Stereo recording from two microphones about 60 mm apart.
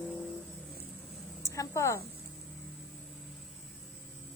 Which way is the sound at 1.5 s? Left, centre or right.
Left.